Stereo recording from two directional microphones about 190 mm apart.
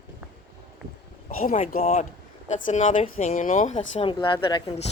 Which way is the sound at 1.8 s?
35° left (ahead or behind).